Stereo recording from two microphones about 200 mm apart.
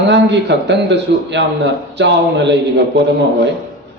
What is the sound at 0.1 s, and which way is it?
A man's voice, 60° right (ahead or behind).